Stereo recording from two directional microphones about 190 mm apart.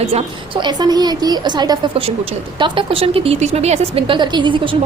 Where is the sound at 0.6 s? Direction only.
20° right (ahead or behind).